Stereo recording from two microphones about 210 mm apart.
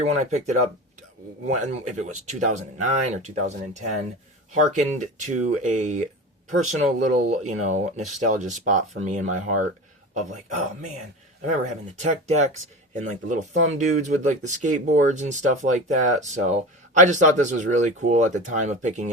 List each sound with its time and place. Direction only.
0.0 s speech: 30° right (ahead or behind)
1.8 s speech: 35° right (ahead or behind)
11.4 s speech: 35° right (ahead or behind)